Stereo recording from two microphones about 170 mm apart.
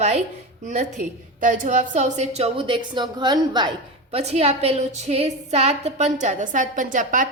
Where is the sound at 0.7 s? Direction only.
45° right (ahead or behind).